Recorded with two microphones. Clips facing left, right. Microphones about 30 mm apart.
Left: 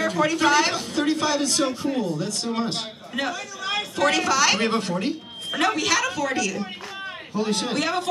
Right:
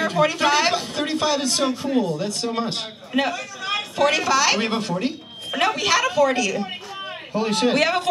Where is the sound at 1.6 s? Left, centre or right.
Centre.